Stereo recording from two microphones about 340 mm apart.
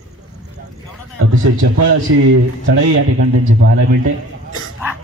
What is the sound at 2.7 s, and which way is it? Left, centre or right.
Speech, right.